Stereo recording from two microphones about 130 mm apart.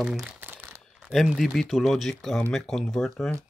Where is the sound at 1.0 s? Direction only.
Centre (ahead or behind).